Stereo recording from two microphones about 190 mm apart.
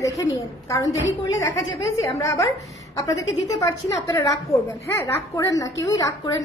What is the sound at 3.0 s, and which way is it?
A woman's voice, 15° left (ahead or behind).